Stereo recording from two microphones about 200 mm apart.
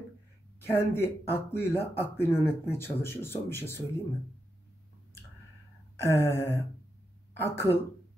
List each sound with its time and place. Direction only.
0.6 s speech: 10° left (ahead or behind)
5.9 s speech: 15° left (ahead or behind)